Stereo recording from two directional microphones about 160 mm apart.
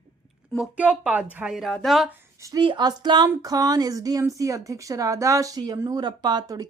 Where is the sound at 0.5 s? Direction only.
5° right (ahead or behind).